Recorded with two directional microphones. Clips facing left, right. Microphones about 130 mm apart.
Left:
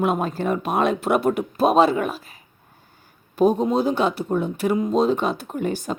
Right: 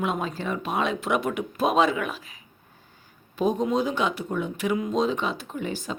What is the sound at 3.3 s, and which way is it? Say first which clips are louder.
Speech: left 5 dB; 40° left (ahead or behind).